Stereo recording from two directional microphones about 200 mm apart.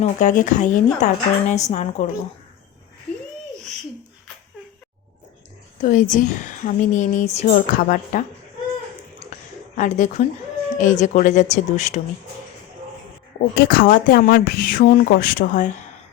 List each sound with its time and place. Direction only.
0.0 s speech: 40° left (ahead or behind)
5.8 s speech: 40° left (ahead or behind)
9.7 s speech: 40° left (ahead or behind)
13.7 s speech: 45° left (ahead or behind)